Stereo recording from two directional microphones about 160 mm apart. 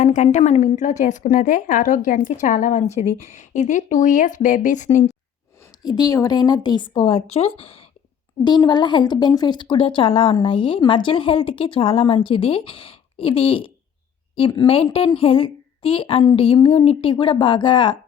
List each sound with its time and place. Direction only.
0.0 s a woman's voice: 50° left (ahead or behind)
5.8 s speech: 25° left (ahead or behind)
8.4 s speech: 25° left (ahead or behind)